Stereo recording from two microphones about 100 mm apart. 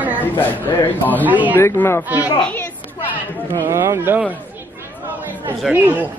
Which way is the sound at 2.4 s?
15° left (ahead or behind).